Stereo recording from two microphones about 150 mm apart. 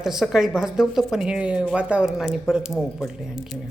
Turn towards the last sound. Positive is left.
turn(degrees=-5)  # may be behind; listen again after turning